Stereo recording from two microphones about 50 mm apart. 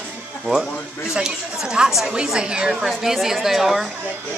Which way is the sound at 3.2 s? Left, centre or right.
Centre.